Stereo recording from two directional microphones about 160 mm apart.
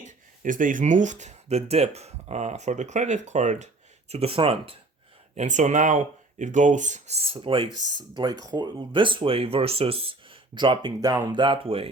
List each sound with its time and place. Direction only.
0.0 s speech: 55° right (ahead or behind); by 4.8 s 35° right (ahead or behind)
5.3 s speech: 45° right (ahead or behind)